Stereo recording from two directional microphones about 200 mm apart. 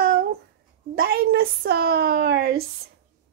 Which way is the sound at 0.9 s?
50° right (ahead or behind).